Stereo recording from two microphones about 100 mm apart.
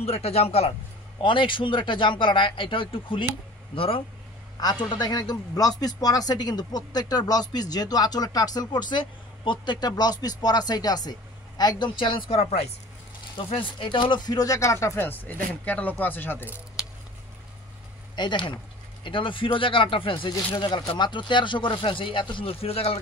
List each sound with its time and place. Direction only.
0.0 s a man's voice: 90° left
1.2 s speech: 55° left (ahead or behind)
4.6 s a man's voice: 40° left (ahead or behind)
12.4 s a man's voice: 90° left
13.5 s speech: 55° left (ahead or behind); by 16.4 s 20° left (ahead or behind)
18.1 s speech: 50° left (ahead or behind); by 22.9 s 80° left